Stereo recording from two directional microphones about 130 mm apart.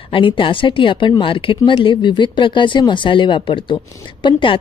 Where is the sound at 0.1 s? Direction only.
40° left (ahead or behind).